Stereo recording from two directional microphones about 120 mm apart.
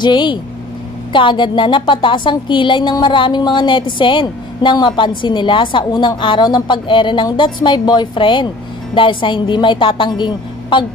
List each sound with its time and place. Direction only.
0.0 s a woman's voice: 40° left (ahead or behind)